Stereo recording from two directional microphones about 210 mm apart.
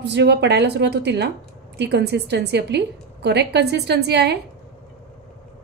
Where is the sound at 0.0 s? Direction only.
55° right (ahead or behind).